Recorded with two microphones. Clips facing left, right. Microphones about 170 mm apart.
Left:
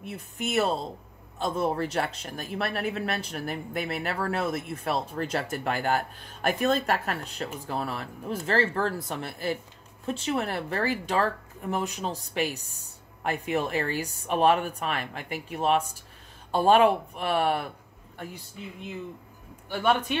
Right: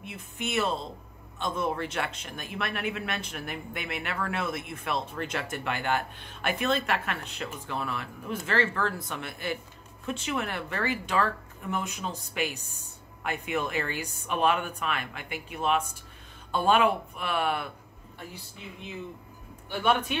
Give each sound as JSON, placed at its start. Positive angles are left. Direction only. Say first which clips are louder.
{"t": 0.0, "sound": "speech", "louder": "left 2 dB", "side_deg": 40}